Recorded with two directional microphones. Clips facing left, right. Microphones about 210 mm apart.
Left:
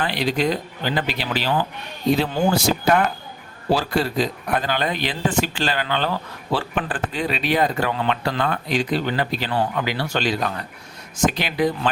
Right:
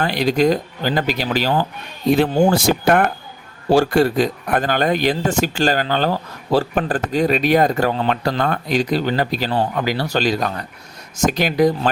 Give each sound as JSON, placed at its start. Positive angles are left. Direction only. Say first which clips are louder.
{"t": 0.0, "sound": "speech", "louder": "right 5 dB", "side_deg": -45}